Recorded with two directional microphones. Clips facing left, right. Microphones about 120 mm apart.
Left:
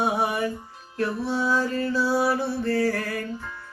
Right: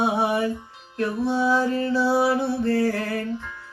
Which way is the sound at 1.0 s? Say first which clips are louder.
Right 3 dB; 20° right (ahead or behind).